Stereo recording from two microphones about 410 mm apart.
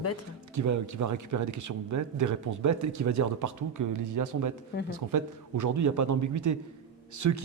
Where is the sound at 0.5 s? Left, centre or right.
Right.